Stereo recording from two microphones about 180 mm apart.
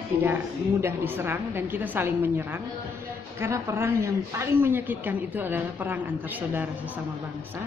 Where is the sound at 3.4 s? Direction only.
15° right (ahead or behind).